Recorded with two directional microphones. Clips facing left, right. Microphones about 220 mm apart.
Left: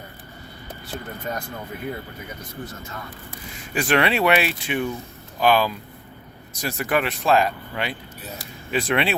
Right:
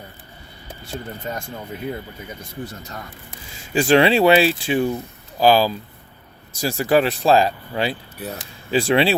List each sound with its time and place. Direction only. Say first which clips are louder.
1.3 s speech: even; 25° right (ahead or behind)
3.6 s speech: right 6 dB; 30° right (ahead or behind)